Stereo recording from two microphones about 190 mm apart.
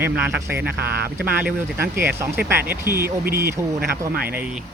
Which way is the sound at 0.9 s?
60° right (ahead or behind).